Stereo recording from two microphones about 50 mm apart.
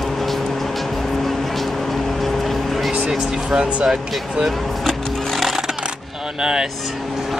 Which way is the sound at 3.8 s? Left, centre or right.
Centre.